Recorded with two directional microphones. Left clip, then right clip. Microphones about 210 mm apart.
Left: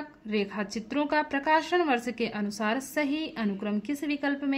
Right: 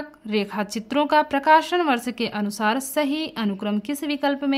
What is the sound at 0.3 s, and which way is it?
A woman's voice, 40° right (ahead or behind).